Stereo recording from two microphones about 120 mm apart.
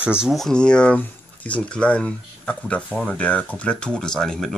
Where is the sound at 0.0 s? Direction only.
10° right (ahead or behind).